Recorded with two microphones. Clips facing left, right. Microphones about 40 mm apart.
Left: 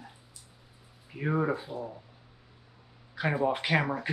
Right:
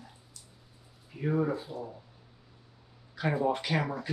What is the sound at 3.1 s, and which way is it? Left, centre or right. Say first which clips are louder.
Speech: left 1 dB; centre.